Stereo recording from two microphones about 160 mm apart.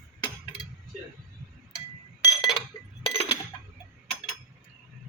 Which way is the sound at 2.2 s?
25° left (ahead or behind).